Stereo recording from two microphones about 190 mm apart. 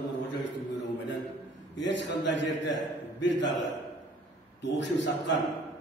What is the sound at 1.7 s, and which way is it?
A man's voice, 70° left (ahead or behind).